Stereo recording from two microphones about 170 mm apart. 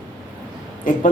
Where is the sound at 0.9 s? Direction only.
50° left (ahead or behind).